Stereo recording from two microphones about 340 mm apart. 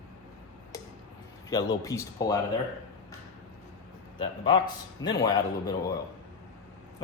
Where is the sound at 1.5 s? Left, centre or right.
Centre.